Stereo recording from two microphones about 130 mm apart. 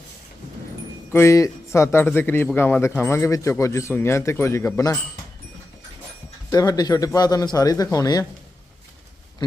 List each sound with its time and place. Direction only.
1.1 s a man's voice: 20° left (ahead or behind)
6.5 s a man's voice: 30° left (ahead or behind)
9.4 s a sound: 35° left (ahead or behind)